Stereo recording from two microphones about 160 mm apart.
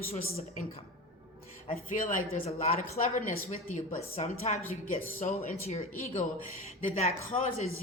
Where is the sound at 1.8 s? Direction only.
60° left (ahead or behind); by 7.6 s 40° left (ahead or behind).